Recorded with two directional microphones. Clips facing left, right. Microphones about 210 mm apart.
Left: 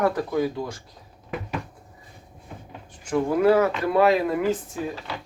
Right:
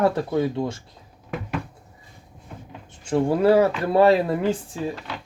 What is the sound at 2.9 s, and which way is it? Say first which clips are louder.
Speech: right 2 dB; 25° right (ahead or behind).